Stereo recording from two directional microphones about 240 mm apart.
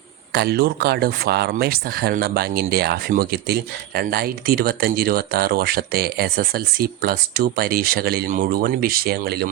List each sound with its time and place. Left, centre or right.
0.3 s speech: right